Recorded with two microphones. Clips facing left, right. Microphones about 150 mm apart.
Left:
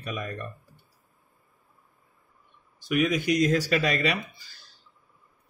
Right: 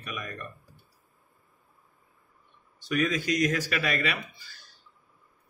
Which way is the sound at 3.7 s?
35° left (ahead or behind).